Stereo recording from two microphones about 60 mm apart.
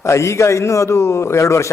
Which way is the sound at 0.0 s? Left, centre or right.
Left.